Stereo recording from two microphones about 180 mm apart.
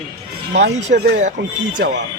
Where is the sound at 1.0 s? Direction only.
60° right (ahead or behind).